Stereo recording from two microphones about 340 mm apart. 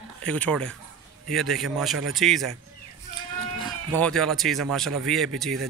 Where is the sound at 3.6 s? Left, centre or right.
Centre.